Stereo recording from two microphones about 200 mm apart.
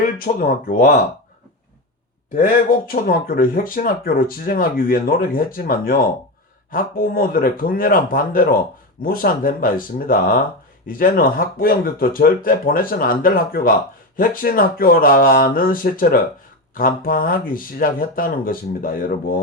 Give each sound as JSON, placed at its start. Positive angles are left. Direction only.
{"t": 0.0, "sound": "speech", "side_deg": 45}
{"t": 2.3, "sound": "speech", "side_deg": 45}